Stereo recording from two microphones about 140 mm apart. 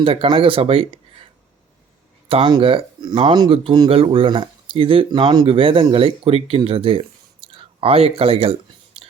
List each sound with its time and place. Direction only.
0.0 s speech: 40° right (ahead or behind)
2.3 s speech: 35° right (ahead or behind)
8.9 s whispering: 45° right (ahead or behind)